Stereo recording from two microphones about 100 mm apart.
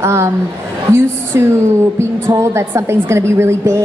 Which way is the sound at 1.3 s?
30° right (ahead or behind).